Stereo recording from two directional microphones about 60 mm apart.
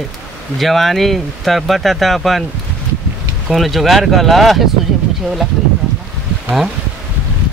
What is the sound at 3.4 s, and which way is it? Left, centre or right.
Speech, centre.